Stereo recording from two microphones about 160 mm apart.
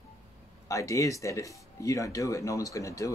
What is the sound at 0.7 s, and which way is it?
Speech, 20° left (ahead or behind).